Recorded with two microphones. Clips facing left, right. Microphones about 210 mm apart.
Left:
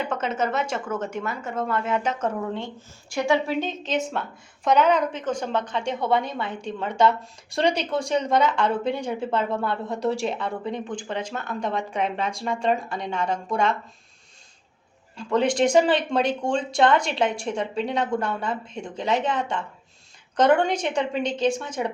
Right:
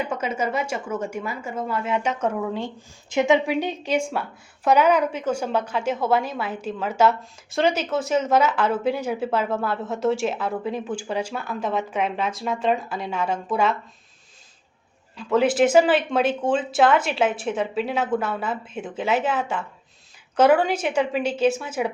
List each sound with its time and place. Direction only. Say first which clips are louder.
0.0 s a woman's voice: even; 10° right (ahead or behind)
3.1 s a woman's voice: right 3 dB; 20° right (ahead or behind)
15.2 s a woman's voice: right 2 dB; 5° right (ahead or behind)